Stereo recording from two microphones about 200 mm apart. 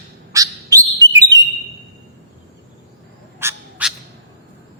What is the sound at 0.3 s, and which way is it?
Bird, 15° right (ahead or behind).